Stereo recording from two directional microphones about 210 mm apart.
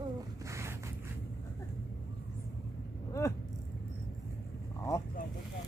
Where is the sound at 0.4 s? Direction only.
15° right (ahead or behind).